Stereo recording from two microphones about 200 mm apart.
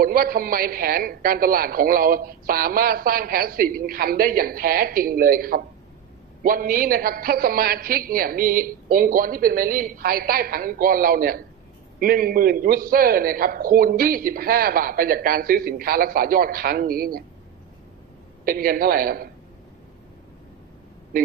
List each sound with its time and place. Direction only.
0.0 s a man's voice: 45° right (ahead or behind)
18.4 s a man's voice: 45° right (ahead or behind)